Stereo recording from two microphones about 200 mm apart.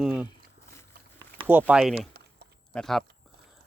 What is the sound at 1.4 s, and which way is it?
Speech, 10° right (ahead or behind).